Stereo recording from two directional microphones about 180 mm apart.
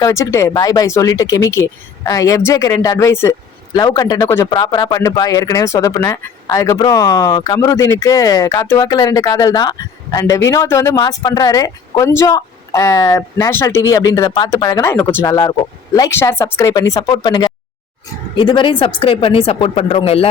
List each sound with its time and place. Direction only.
0.0 s speech: 15° left (ahead or behind); by 20.2 s 35° left (ahead or behind)